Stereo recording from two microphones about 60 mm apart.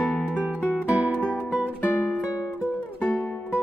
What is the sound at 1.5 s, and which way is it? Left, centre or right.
Music, left.